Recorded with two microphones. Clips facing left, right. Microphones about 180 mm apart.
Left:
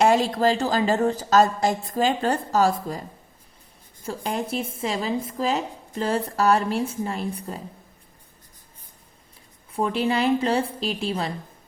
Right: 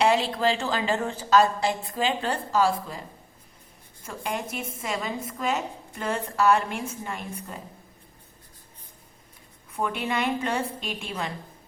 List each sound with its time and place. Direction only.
0.0 s a woman's voice: 45° left (ahead or behind)
4.0 s a woman's voice: 35° left (ahead or behind)
9.7 s a woman's voice: 30° left (ahead or behind)